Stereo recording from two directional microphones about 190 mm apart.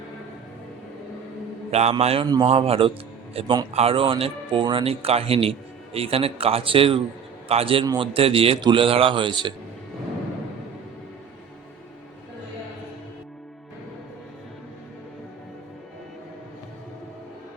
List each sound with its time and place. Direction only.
1.7 s a man's voice: 35° right (ahead or behind)